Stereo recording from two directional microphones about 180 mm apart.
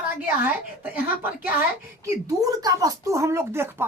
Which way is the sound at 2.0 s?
20° right (ahead or behind).